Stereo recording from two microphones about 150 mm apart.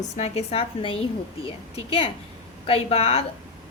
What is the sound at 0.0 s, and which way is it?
A woman's voice, 50° left (ahead or behind).